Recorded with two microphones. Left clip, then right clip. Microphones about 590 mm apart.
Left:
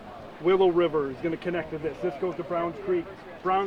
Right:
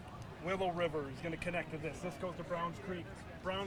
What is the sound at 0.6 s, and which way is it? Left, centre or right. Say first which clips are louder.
Speech: left 13 dB; left.